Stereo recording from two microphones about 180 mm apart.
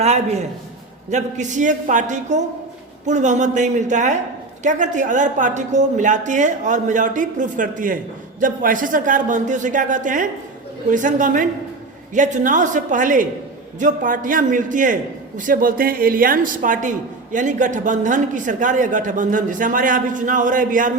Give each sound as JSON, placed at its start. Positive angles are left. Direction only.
{"t": 0.0, "sound": "a man's voice", "side_deg": -40}